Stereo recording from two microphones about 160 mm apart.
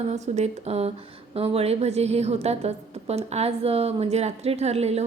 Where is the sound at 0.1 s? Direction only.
45° right (ahead or behind).